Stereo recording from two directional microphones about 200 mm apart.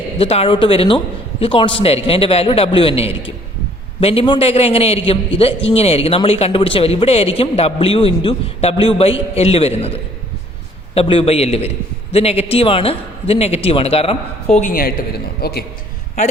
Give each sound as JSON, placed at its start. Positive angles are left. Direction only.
{"t": 0.2, "sound": "a man's voice", "side_deg": 30}